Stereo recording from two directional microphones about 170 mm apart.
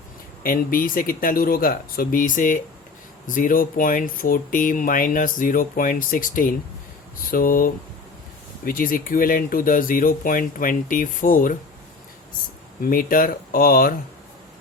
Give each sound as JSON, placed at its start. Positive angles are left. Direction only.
{"t": 0.4, "sound": "speech", "side_deg": 55}
{"t": 12.8, "sound": "speech", "side_deg": 55}